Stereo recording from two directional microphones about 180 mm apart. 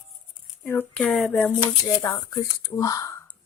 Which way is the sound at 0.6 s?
10° left (ahead or behind).